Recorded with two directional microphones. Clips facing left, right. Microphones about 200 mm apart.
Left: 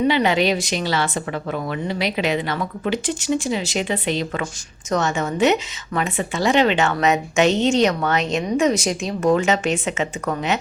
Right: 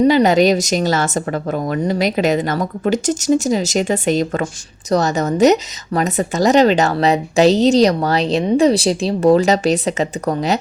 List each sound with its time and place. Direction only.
0.0 s a woman's voice: 40° right (ahead or behind)